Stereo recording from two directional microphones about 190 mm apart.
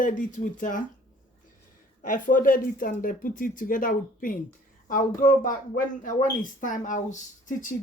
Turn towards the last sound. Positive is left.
turn(degrees=40)  # may be behind; listen again after turning